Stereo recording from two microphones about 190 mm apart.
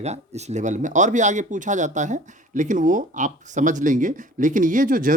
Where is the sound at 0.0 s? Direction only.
35° right (ahead or behind).